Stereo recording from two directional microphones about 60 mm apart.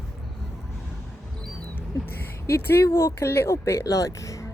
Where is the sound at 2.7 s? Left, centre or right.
Left.